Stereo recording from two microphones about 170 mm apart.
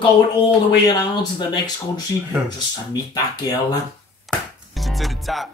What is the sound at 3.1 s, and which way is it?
Speech, 25° left (ahead or behind).